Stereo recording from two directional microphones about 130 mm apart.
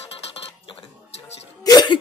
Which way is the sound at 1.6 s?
30° left (ahead or behind).